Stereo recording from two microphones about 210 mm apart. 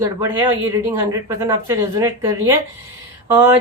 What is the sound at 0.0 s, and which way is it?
Speech, 10° right (ahead or behind).